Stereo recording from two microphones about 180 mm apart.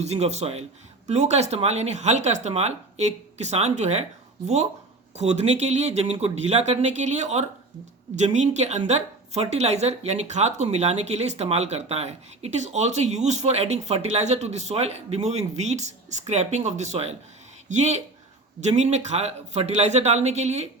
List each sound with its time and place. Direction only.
0.0 s speech: 35° right (ahead or behind)
5.1 s speech: 40° right (ahead or behind)